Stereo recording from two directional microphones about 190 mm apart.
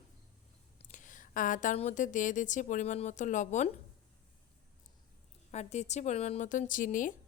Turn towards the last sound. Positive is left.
turn(degrees=45)  # may be behind; listen again after turning